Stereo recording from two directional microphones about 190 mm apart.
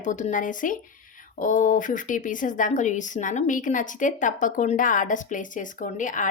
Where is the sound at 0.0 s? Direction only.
40° left (ahead or behind).